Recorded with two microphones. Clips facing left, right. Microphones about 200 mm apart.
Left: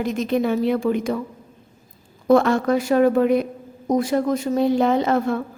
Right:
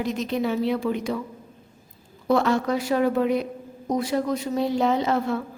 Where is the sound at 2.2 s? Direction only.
50° left (ahead or behind).